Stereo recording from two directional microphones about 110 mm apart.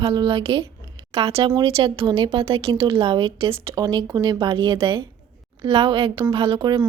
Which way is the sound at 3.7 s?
40° right (ahead or behind).